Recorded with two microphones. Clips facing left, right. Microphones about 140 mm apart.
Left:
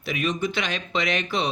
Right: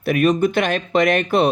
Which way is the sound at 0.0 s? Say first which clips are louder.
Right 10 dB; 55° right (ahead or behind).